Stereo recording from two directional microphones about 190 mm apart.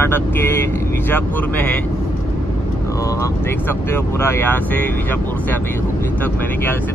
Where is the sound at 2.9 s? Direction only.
15° left (ahead or behind).